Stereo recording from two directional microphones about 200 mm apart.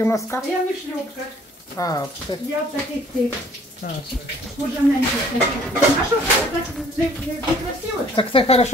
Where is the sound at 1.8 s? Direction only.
15° left (ahead or behind).